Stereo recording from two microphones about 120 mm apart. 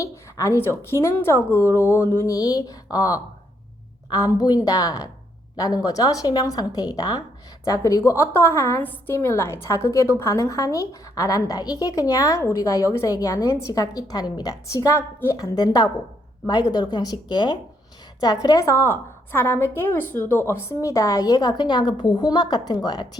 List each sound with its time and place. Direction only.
0.0 s a woman's voice: 25° left (ahead or behind)